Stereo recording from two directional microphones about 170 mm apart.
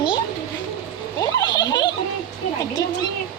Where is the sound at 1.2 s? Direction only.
20° left (ahead or behind).